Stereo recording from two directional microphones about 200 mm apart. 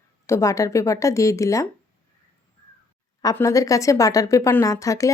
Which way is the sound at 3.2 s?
15° left (ahead or behind).